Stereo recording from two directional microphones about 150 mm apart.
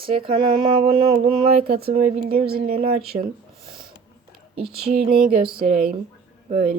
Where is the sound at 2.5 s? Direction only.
80° right.